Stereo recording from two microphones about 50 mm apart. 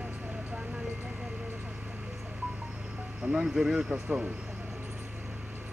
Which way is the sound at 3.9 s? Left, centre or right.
Centre.